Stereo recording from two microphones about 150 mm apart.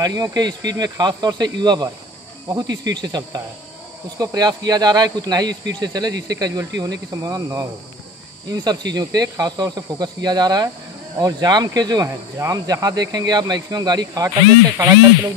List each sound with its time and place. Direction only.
0.0 s speech: 25° right (ahead or behind)